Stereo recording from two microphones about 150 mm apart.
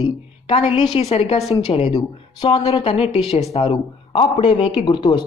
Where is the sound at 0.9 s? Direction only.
40° left (ahead or behind).